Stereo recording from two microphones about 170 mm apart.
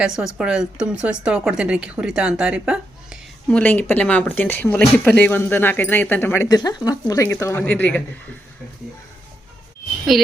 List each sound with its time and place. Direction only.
0.3 s speech: 5° right (ahead or behind)
3.5 s speech: 10° left (ahead or behind)
10.1 s a woman's voice: centre (ahead or behind)